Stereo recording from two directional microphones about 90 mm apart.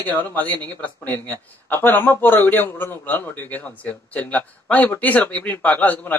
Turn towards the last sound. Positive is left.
turn(degrees=20)  # may be behind; listen again after turning